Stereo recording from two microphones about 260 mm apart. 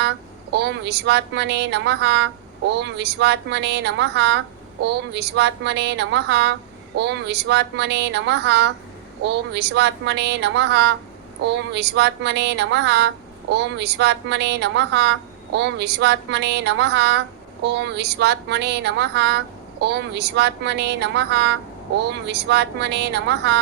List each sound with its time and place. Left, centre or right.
0.5 s speech: right